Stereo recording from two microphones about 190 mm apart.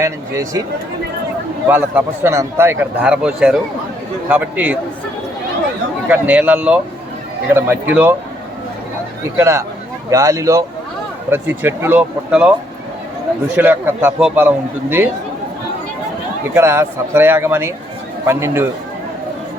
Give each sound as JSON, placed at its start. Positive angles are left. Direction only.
{"t": 0.0, "sound": "a man's voice", "side_deg": -15}
{"t": 1.6, "sound": "a man's voice", "side_deg": -10}
{"t": 6.1, "sound": "a man's voice", "side_deg": -10}
{"t": 9.4, "sound": "a man's voice", "side_deg": -15}
{"t": 13.6, "sound": "a man's voice", "side_deg": -10}
{"t": 16.6, "sound": "a man's voice", "side_deg": -15}